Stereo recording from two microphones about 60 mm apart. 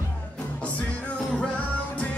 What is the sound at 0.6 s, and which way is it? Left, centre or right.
Music, centre.